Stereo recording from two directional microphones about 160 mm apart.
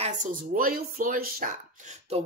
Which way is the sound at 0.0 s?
55° right (ahead or behind).